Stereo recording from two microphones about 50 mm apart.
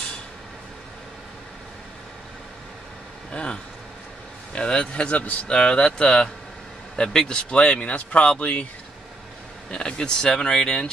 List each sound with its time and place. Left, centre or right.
3.3 s speech: centre
4.6 s speech: left
7.5 s speech: left
9.7 s speech: centre